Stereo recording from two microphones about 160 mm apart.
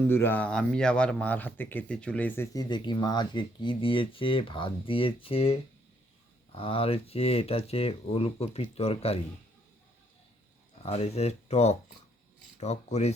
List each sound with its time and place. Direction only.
0.1 s speech: 15° left (ahead or behind); by 9.1 s 40° left (ahead or behind)
10.8 s speech: 40° left (ahead or behind)